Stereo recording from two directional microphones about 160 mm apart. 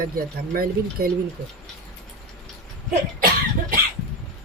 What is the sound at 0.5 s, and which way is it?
Speech, 65° right (ahead or behind).